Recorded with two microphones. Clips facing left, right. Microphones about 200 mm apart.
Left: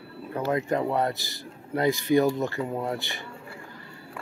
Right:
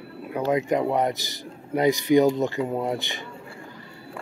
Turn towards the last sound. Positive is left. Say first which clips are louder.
# right 3 dB
turn(degrees=-20)  # may be behind; listen again after turning